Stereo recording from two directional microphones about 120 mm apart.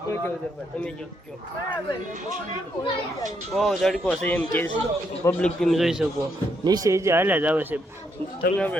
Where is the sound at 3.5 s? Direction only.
5° left (ahead or behind).